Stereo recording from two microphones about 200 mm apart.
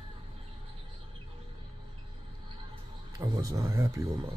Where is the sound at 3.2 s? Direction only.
15° right (ahead or behind).